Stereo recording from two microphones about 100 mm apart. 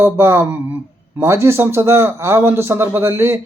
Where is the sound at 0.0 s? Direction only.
25° right (ahead or behind).